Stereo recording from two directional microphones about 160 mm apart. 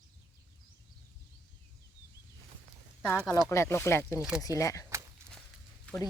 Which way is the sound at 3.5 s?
15° left (ahead or behind).